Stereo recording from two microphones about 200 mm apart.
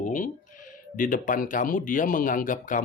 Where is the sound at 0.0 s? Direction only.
40° left (ahead or behind).